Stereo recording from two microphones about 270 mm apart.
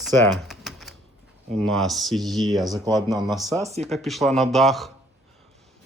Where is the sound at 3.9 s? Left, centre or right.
Centre.